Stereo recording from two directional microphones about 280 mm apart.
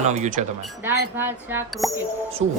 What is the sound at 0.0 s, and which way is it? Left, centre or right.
Speech, right.